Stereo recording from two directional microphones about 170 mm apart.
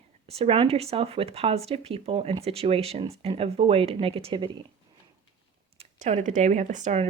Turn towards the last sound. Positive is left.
turn(degrees=-45)  # may be behind; listen again after turning